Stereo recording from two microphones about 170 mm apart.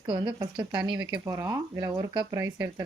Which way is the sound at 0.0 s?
25° right (ahead or behind).